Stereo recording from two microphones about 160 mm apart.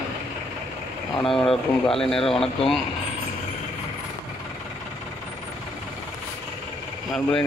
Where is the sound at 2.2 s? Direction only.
35° left (ahead or behind).